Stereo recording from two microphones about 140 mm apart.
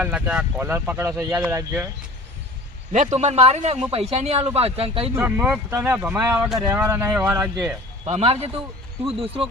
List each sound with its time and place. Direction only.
0.0 s speech: 10° right (ahead or behind)
2.9 s speech: 55° right (ahead or behind)
5.1 s speech: 15° right (ahead or behind)
6.7 s speech: 20° right (ahead or behind)
7.1 s speech: 5° right (ahead or behind)
8.0 s speech: 50° right (ahead or behind)